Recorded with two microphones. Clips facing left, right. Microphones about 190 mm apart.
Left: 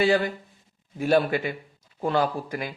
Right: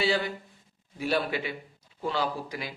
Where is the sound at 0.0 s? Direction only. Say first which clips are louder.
Left 6 dB; 50° left (ahead or behind).